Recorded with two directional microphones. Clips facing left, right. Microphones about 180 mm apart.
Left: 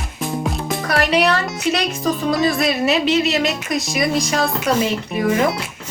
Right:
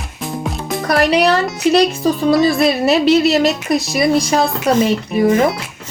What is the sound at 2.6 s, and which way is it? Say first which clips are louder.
Speech: right 4 dB; 35° right (ahead or behind).